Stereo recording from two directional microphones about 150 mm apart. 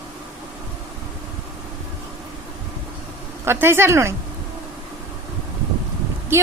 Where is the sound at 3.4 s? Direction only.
15° right (ahead or behind).